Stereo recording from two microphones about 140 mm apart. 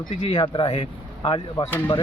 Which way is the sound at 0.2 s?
40° left (ahead or behind).